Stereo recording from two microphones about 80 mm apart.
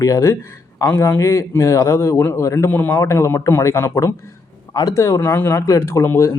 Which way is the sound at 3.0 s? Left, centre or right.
Left.